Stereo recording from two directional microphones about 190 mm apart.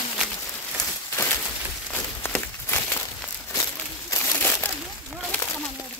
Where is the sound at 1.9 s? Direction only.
10° left (ahead or behind).